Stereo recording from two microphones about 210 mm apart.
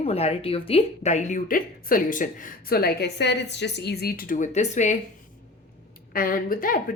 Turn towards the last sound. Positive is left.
turn(degrees=40)  # may be behind; listen again after turning